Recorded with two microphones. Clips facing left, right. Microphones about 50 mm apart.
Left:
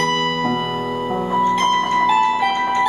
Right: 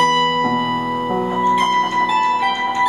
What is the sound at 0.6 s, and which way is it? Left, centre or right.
Music, centre.